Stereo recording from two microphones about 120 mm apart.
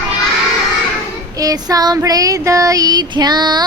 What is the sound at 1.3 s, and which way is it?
Child singing, 30° right (ahead or behind).